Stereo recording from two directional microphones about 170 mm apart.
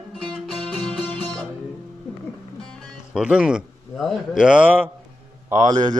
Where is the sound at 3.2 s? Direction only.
5° right (ahead or behind).